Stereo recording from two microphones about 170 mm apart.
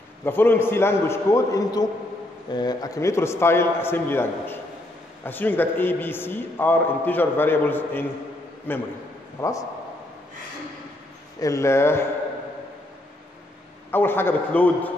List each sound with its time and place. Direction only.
0.2 s a man's voice: 10° left (ahead or behind)
11.3 s a man's voice: 20° left (ahead or behind)
13.8 s a man's voice: 10° left (ahead or behind)